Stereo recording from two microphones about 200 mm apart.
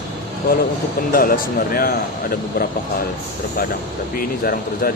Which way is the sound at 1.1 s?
45° left (ahead or behind).